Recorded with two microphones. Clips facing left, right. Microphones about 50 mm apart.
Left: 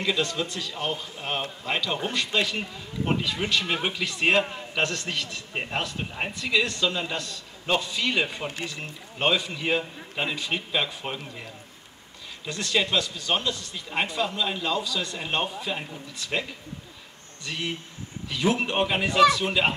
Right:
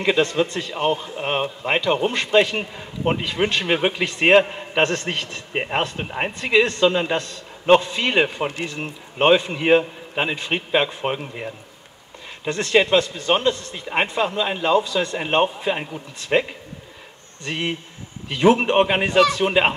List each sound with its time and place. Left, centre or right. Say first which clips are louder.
0.0 s a man's voice: right 8 dB; right